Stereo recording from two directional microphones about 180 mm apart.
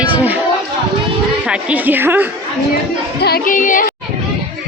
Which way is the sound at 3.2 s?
55° left (ahead or behind).